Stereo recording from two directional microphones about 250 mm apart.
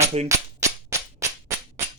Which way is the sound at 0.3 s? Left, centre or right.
Centre.